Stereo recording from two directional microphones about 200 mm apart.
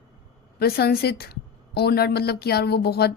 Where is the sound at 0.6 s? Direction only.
55° left (ahead or behind).